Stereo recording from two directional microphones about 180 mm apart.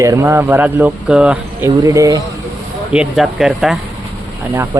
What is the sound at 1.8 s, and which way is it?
Speech, 20° right (ahead or behind).